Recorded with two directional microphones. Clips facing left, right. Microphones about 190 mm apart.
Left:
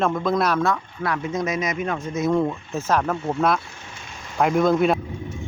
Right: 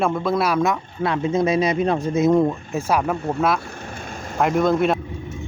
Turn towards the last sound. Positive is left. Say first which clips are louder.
# even
turn(degrees=0)  # may be behind; listen again after turning